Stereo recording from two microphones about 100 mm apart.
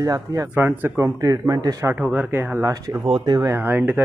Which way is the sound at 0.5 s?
20° right (ahead or behind).